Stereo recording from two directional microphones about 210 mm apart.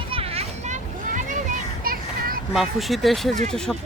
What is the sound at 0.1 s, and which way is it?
Children playing, 30° right (ahead or behind).